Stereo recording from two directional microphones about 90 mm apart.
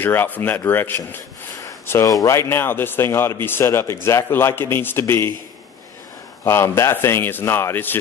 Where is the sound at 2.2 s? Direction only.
30° left (ahead or behind).